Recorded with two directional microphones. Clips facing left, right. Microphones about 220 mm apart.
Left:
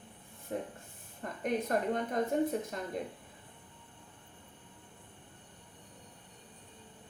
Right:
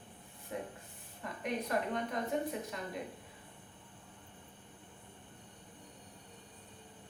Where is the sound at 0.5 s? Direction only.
40° left (ahead or behind).